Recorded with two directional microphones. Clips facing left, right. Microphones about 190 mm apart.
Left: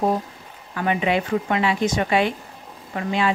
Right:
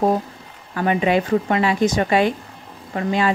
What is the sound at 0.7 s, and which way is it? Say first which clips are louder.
Speech: right 3 dB; 40° right (ahead or behind).